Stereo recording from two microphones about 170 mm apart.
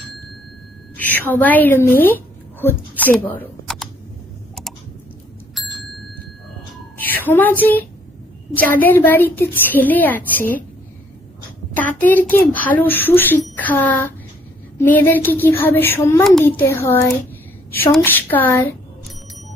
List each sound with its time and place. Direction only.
0.9 s a woman's voice: 10° left (ahead or behind)
5.6 s bicycle bell: centre (ahead or behind)
7.0 s a woman's voice: 10° left (ahead or behind)
11.7 s a child's voice: 10° left (ahead or behind)